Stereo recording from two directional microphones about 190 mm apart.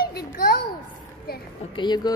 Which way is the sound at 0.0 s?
50° left (ahead or behind).